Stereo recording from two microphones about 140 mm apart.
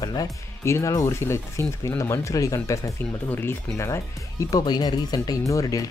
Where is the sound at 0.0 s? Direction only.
30° left (ahead or behind).